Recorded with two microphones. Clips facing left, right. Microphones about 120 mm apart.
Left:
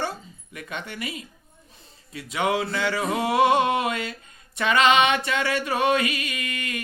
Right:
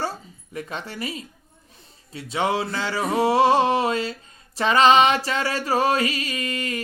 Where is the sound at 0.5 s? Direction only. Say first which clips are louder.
Right 3 dB; 30° right (ahead or behind).